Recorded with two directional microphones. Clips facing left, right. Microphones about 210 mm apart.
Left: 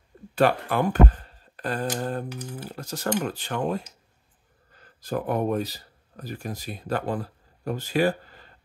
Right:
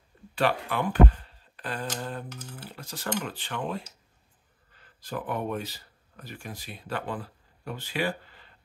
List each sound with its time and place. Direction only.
0.3 s speech: 45° left (ahead or behind)